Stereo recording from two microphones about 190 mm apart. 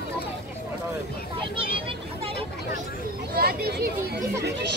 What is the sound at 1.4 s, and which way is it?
Vehicle, 30° right (ahead or behind).